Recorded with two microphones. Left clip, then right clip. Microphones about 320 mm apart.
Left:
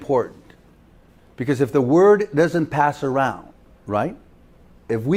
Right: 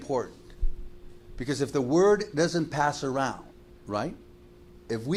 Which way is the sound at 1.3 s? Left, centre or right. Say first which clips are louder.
Left 9 dB; left.